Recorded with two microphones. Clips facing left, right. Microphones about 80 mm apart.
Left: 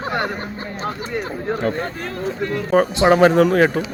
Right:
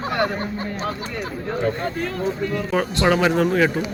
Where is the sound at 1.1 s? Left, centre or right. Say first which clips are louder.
Left 3 dB; left.